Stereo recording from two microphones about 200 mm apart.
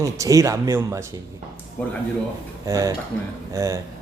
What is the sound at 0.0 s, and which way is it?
Speech, 15° right (ahead or behind).